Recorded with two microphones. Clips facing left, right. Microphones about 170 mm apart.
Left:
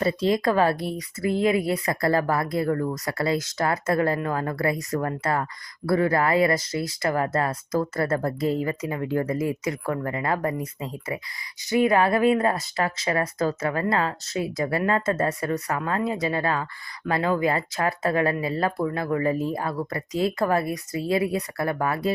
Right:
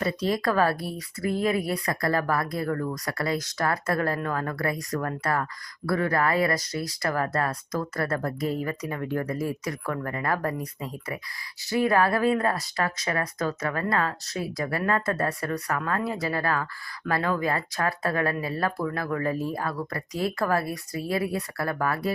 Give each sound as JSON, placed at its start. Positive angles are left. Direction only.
{"t": 0.0, "sound": "speech", "side_deg": 25}
{"t": 11.7, "sound": "speech", "side_deg": 20}